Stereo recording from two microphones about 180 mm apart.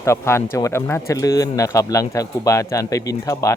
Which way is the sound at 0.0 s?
15° left (ahead or behind).